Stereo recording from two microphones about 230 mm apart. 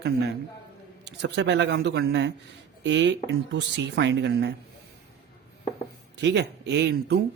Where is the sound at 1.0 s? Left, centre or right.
Right.